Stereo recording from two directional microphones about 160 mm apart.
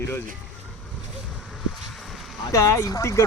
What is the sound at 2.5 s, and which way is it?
Speech, 20° left (ahead or behind).